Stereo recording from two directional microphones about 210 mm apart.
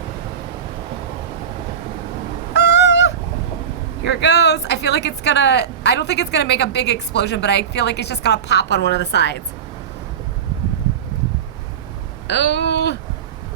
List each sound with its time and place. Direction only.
2.5 s goose: 55° left (ahead or behind)
4.0 s speech: 55° left (ahead or behind)
12.3 s a sound: 55° left (ahead or behind)